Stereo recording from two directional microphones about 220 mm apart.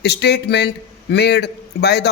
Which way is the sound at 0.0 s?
50° left (ahead or behind).